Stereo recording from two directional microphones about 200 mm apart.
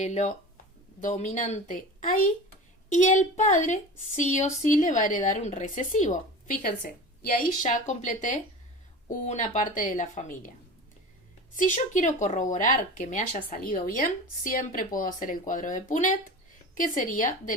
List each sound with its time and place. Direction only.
0.0 s a woman's voice: 35° left (ahead or behind)
11.5 s a woman's voice: 40° left (ahead or behind)